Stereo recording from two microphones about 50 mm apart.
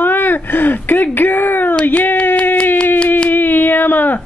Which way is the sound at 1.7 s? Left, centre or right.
Left.